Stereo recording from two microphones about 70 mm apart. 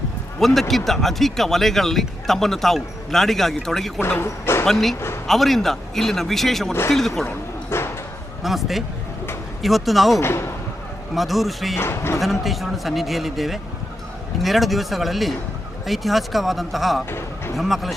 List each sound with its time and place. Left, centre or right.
0.3 s speech: centre
4.2 s speech: left
4.6 s speech: centre
4.9 s speech: left
5.2 s speech: centre
7.3 s bow-wow: left
8.4 s speech: centre
10.2 s speech: left
11.1 s speech: centre
11.8 s speech: left
12.2 s speech: centre
17.1 s a sound: left
17.5 s speech: centre